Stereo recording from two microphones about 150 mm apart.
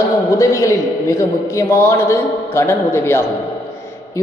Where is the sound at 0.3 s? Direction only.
20° left (ahead or behind).